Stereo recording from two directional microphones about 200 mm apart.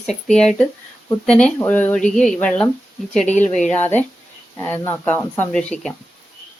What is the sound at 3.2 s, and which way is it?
Speech, 35° left (ahead or behind).